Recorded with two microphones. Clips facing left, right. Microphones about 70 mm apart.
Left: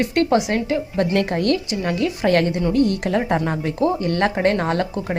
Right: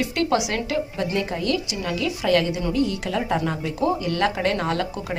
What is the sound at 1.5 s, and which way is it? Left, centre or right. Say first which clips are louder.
A woman's voice: left 4 dB; left.